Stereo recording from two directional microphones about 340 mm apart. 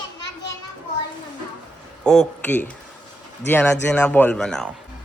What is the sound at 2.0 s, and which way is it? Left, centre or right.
Speech, centre.